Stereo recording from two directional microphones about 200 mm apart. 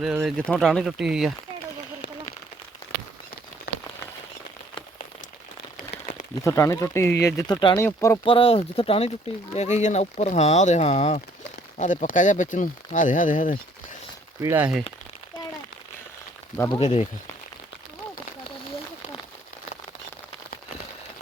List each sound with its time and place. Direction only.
0.0 s speech: 5° right (ahead or behind)
0.4 s speech: 5° left (ahead or behind)
3.7 s rain on surface: 55° left (ahead or behind)
6.4 s speech: 15° left (ahead or behind)
8.2 s speech: 25° left (ahead or behind); by 13.6 s 40° left (ahead or behind)
14.4 s speech: 10° right (ahead or behind)
16.8 s speech: 30° left (ahead or behind)